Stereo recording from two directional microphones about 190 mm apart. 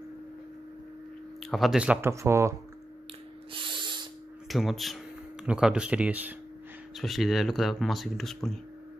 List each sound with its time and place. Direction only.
1.4 s speech: centre (ahead or behind)
3.5 s owl: 25° right (ahead or behind)
4.5 s speech: centre (ahead or behind)